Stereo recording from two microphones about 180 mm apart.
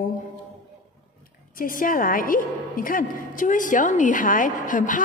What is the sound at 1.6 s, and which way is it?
A woman's voice, 50° left (ahead or behind).